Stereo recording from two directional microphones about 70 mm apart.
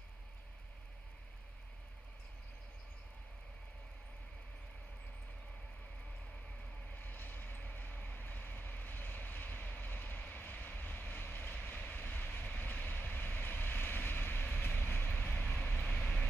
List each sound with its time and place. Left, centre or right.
7.0 s vehicle: left